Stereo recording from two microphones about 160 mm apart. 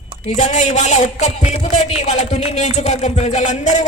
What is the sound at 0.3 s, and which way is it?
A man's voice, 50° left (ahead or behind).